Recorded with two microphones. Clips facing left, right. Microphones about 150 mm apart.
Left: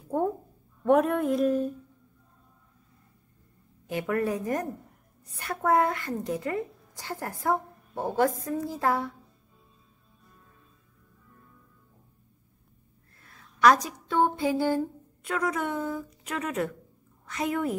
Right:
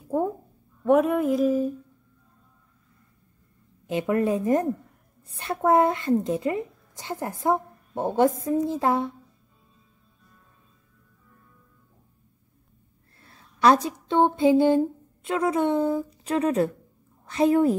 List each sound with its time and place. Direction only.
0.1 s a woman's voice: 5° right (ahead or behind)
3.8 s speech: 20° right (ahead or behind)
13.2 s a woman's voice: 30° right (ahead or behind)